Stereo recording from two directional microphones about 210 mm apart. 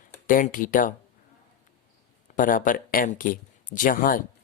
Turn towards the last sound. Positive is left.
turn(degrees=40)  # may be behind; listen again after turning